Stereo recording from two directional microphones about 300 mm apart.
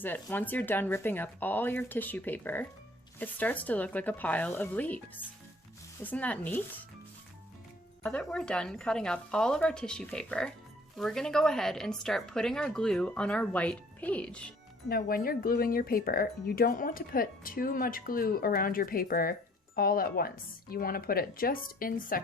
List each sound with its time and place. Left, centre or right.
0.0 s a woman's voice: centre
8.0 s a woman's voice: centre
14.8 s speech: left